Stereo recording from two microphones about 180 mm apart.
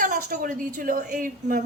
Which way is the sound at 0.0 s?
50° right (ahead or behind).